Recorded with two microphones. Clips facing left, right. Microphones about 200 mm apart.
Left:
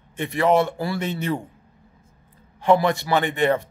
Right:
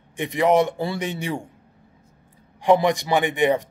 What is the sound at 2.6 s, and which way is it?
A man's voice, 15° right (ahead or behind).